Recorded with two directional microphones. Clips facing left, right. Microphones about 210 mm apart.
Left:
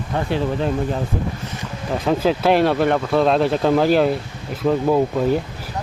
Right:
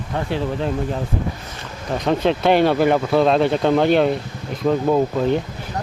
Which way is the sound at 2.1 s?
5° left (ahead or behind).